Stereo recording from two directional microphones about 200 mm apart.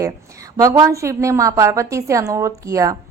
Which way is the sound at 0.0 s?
15° right (ahead or behind).